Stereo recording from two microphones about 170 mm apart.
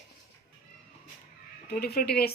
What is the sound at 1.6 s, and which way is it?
Speech, 65° left (ahead or behind).